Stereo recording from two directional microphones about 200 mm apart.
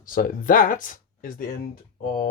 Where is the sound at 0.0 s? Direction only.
45° left (ahead or behind).